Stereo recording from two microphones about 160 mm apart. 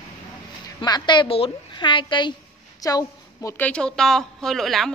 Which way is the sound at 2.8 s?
20° left (ahead or behind).